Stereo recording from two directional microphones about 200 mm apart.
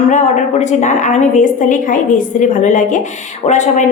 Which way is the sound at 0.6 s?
35° left (ahead or behind).